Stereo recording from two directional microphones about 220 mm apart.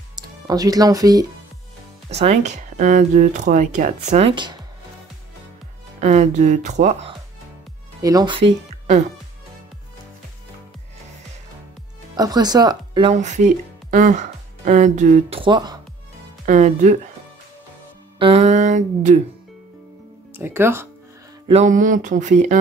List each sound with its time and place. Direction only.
0.1 s speech: 15° right (ahead or behind)
2.0 s speech: 30° right (ahead or behind)
5.9 s speech: 30° right (ahead or behind)
8.0 s speech: 15° right (ahead or behind)
12.2 s speech: 20° right (ahead or behind)
13.1 s speech: 30° right (ahead or behind)
16.4 s speech: 35° right (ahead or behind)
18.2 s a sound: 30° right (ahead or behind)
20.3 s speech: 10° right (ahead or behind)
21.5 s speech: 30° right (ahead or behind)